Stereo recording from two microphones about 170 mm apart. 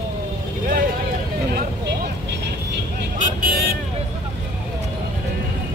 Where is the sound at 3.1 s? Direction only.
55° right (ahead or behind).